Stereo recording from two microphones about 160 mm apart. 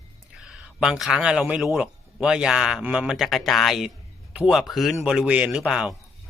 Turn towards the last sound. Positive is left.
turn(degrees=-5)  # may be behind; listen again after turning